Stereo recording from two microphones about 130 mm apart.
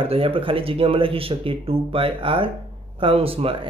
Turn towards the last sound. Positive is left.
turn(degrees=-45)  # may be behind; listen again after turning